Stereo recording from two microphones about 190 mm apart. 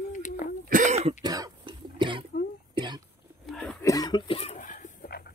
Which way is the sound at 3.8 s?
20° left (ahead or behind).